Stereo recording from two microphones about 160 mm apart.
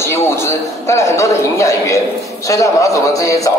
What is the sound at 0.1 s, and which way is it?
A man's voice, 15° left (ahead or behind).